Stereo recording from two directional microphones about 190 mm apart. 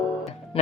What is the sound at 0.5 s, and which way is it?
Music, 30° left (ahead or behind).